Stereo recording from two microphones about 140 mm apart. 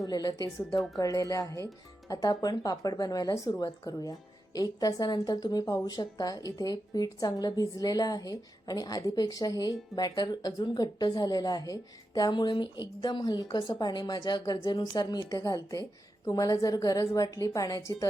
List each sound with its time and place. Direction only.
0.0 s a woman's voice: 25° left (ahead or behind)